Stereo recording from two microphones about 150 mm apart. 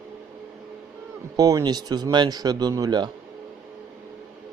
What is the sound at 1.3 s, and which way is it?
A man's voice, 25° right (ahead or behind).